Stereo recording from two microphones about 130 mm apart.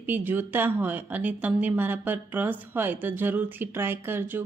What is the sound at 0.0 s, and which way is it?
Speech, 15° right (ahead or behind).